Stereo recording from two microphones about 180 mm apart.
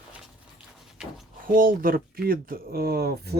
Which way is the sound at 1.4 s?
50° right (ahead or behind).